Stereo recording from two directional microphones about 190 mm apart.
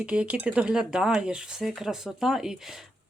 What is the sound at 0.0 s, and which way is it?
Speech, 5° right (ahead or behind).